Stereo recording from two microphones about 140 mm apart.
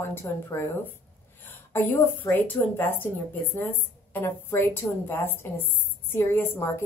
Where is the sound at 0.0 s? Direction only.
15° left (ahead or behind).